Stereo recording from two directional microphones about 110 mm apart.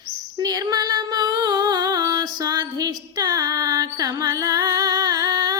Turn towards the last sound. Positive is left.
turn(degrees=-35)  # may be behind; listen again after turning